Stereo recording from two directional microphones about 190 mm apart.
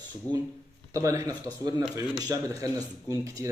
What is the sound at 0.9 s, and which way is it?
Speech, 15° right (ahead or behind).